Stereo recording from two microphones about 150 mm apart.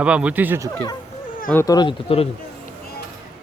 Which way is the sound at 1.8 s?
35° left (ahead or behind).